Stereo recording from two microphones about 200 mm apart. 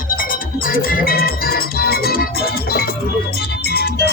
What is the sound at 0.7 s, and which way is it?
Music, 45° left (ahead or behind).